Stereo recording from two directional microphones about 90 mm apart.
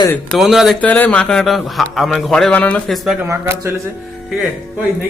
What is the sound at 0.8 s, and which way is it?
A man's voice, 15° left (ahead or behind).